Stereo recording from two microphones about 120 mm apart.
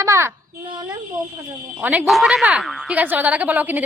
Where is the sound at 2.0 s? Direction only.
5° right (ahead or behind).